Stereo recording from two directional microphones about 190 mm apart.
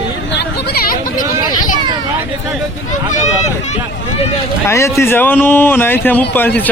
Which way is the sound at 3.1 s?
35° left (ahead or behind).